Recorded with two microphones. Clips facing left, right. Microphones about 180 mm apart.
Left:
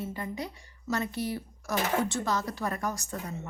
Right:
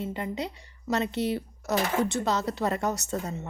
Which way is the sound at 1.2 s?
65° right (ahead or behind).